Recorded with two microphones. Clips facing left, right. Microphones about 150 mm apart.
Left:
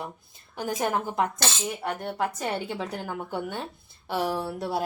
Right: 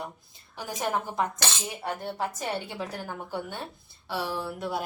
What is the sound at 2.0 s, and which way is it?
Speech, 60° left (ahead or behind).